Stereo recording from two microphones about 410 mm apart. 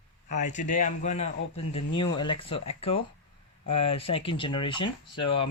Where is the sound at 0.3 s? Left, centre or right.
Centre.